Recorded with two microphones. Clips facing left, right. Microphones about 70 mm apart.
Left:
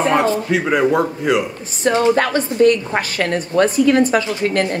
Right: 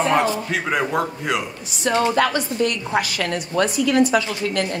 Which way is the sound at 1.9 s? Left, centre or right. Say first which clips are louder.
Left 3 dB; left.